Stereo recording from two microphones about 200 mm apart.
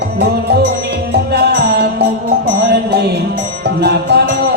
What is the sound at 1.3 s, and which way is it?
Music, 55° right (ahead or behind).